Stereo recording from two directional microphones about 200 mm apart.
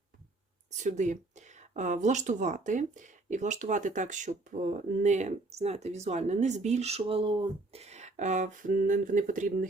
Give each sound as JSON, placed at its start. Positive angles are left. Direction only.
{"t": 0.8, "sound": "speech", "side_deg": -35}